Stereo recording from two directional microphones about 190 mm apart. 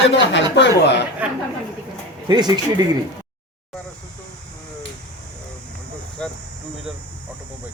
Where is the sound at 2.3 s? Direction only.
20° right (ahead or behind).